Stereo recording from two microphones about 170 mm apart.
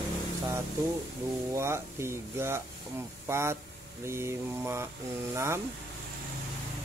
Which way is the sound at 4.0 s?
15° right (ahead or behind).